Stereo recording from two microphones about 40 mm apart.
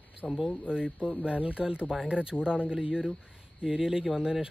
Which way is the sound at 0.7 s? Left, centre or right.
Right.